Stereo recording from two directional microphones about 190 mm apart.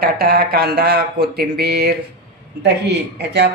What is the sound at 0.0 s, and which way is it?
Speech, 55° right (ahead or behind).